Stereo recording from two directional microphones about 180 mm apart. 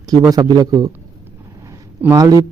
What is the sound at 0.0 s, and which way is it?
Speech, 20° right (ahead or behind).